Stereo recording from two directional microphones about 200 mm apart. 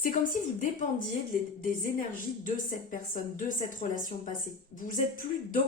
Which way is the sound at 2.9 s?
40° left (ahead or behind).